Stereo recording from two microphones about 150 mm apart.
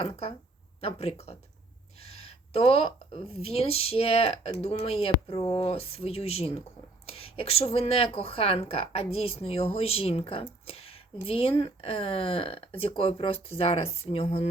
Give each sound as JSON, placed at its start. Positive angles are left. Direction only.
{"t": 0.0, "sound": "speech", "side_deg": 40}